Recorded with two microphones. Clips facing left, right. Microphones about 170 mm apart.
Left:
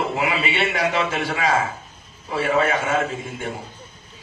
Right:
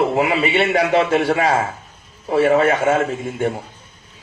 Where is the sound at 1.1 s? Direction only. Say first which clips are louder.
Right 9 dB; 55° right (ahead or behind).